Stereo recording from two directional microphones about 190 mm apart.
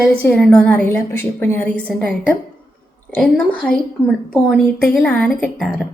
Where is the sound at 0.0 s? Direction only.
5° left (ahead or behind).